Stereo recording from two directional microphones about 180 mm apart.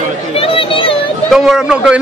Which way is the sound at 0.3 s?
30° left (ahead or behind).